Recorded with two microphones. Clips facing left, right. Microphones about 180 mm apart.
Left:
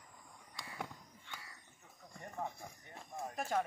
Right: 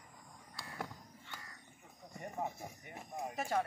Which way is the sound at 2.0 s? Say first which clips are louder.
Right 3 dB; 20° right (ahead or behind).